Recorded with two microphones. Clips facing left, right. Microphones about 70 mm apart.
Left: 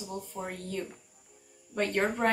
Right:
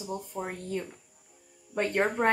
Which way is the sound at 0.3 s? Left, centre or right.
Centre.